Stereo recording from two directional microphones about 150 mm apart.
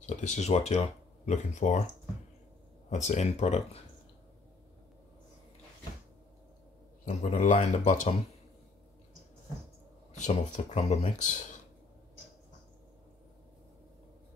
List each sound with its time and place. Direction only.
0.0 s speech: 50° left (ahead or behind)
2.9 s speech: 50° left (ahead or behind)
7.1 s speech: 50° left (ahead or behind)
10.1 s speech: 50° left (ahead or behind)